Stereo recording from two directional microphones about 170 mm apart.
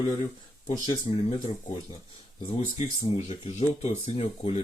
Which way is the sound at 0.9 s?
30° left (ahead or behind).